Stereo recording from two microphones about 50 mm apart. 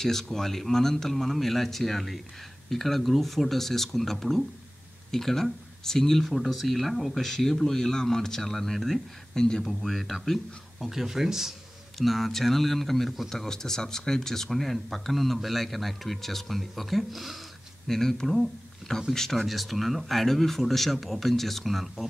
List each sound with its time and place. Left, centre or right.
0.0 s speech: centre
10.8 s speech: centre
12.0 s speech: centre
17.8 s speech: centre